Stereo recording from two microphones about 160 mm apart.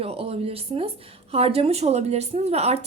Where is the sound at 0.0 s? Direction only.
40° right (ahead or behind).